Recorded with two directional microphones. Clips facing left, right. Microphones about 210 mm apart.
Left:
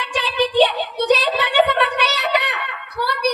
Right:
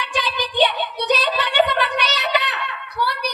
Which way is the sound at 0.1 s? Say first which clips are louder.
Left 8 dB; 60° left (ahead or behind).